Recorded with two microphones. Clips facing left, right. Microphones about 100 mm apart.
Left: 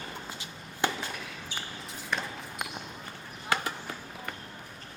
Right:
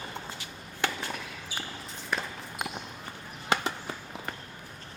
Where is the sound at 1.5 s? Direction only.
5° right (ahead or behind).